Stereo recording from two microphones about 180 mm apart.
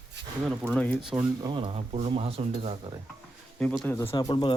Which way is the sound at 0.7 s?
5° left (ahead or behind).